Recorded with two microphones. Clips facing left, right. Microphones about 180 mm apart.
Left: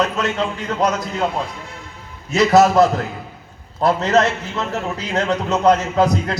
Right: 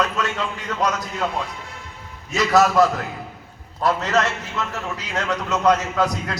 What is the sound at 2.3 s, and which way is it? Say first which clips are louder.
A man's voice: left 4 dB; 25° left (ahead or behind).